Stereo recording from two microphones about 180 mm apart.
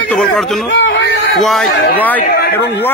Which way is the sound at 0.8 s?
85° left.